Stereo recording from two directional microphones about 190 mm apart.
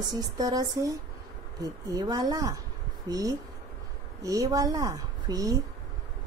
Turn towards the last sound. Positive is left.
turn(degrees=-20)  # may be behind; listen again after turning